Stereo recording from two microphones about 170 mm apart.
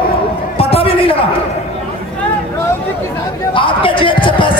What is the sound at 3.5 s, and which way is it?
Speech, 30° left (ahead or behind).